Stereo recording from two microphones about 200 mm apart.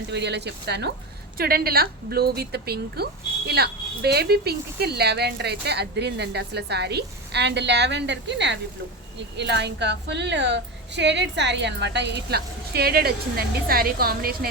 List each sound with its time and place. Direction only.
0.1 s a woman's voice: 55° right (ahead or behind)